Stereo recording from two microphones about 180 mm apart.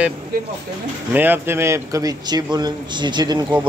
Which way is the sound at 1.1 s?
10° right (ahead or behind).